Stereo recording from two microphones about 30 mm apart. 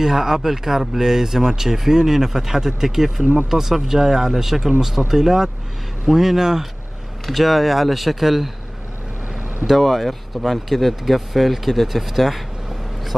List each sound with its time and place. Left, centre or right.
0.0 s speech: centre
7.2 s speech: centre